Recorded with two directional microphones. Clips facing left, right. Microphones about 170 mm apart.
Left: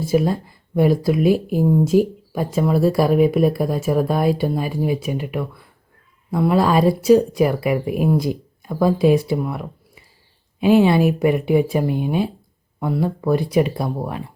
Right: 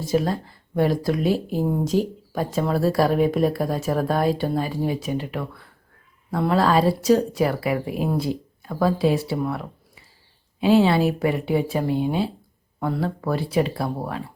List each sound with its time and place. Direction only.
0.0 s speech: 10° left (ahead or behind)